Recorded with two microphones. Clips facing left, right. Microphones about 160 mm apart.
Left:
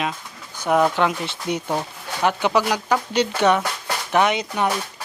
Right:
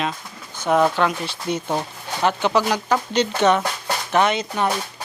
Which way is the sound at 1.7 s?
5° right (ahead or behind).